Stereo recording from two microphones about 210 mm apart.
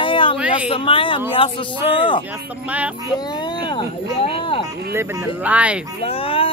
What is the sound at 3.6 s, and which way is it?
Speech, 25° left (ahead or behind).